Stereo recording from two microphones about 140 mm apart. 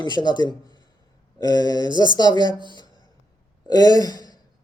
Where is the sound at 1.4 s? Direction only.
25° left (ahead or behind).